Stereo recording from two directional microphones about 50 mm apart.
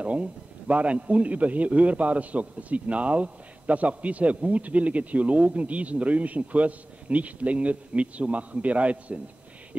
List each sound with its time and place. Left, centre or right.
0.0 s a man's voice: right